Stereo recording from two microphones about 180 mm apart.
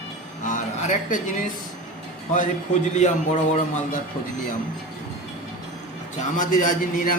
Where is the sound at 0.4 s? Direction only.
45° left (ahead or behind).